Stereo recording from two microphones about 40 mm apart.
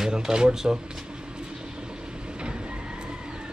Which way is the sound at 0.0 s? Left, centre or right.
Centre.